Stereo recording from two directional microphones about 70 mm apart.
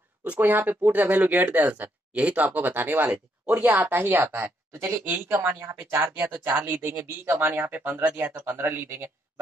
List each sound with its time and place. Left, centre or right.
0.2 s speech: right